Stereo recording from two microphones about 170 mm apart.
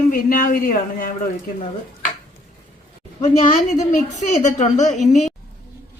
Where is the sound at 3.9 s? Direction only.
45° left (ahead or behind).